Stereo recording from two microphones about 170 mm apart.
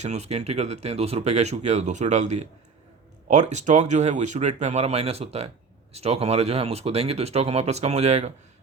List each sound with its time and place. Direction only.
0.0 s speech: 40° right (ahead or behind)